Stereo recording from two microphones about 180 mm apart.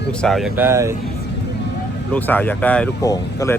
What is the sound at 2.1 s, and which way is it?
Speech, 10° left (ahead or behind).